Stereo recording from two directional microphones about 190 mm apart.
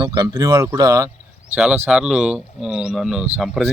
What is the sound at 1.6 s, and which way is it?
Speech, 5° right (ahead or behind).